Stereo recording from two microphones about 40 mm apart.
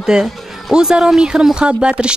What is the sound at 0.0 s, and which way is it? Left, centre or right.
Speech, centre.